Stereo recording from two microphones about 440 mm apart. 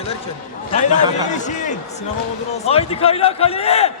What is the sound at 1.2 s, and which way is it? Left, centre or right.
A man's voice, centre.